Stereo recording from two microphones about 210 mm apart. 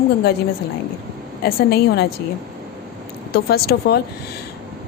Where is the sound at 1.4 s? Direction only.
45° left (ahead or behind).